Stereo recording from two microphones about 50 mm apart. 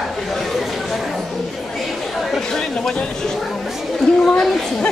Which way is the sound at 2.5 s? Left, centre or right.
Centre.